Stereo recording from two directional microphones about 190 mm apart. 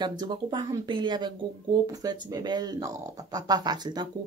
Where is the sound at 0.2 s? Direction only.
25° right (ahead or behind).